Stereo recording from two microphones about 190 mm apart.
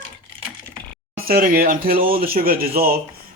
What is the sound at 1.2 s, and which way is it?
A man's voice, 50° right (ahead or behind).